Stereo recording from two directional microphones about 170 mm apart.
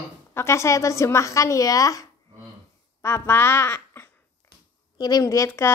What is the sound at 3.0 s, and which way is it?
Speech, 15° left (ahead or behind).